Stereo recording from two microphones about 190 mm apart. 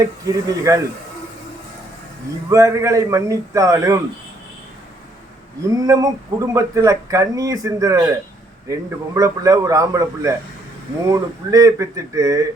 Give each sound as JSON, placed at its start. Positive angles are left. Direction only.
{"t": 0.0, "sound": "speech", "side_deg": -20}
{"t": 2.5, "sound": "speech", "side_deg": -15}
{"t": 5.6, "sound": "speech", "side_deg": -15}